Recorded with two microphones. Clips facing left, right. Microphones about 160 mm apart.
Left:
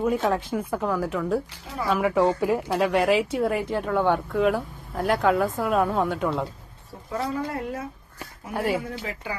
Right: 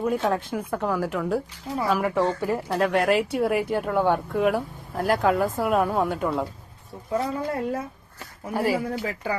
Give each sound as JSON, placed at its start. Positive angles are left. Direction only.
{"t": 0.0, "sound": "speech", "side_deg": 0}
{"t": 7.1, "sound": "speech", "side_deg": -25}
{"t": 8.5, "sound": "speech", "side_deg": 0}